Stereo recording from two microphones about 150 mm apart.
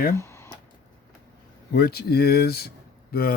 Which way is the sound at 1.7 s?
90° left.